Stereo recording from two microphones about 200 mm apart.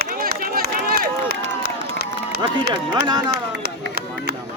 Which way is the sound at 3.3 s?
50° right (ahead or behind).